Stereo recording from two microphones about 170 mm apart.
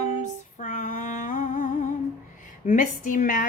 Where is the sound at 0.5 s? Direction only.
50° left (ahead or behind).